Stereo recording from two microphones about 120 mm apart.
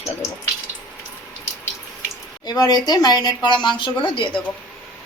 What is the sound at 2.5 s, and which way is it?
A woman's voice, 35° left (ahead or behind).